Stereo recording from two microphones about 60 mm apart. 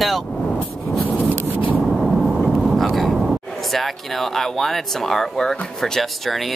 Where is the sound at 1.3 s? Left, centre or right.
Right.